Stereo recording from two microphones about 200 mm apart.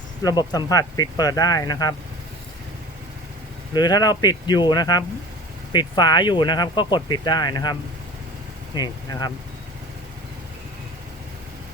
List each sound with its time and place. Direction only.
0.2 s speech: 20° left (ahead or behind)
3.8 s speech: 20° left (ahead or behind)